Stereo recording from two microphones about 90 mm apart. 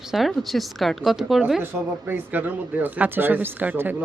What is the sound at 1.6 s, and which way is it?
Speech, 25° right (ahead or behind).